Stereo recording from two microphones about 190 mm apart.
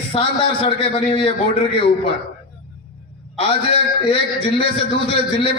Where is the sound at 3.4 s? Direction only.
30° left (ahead or behind).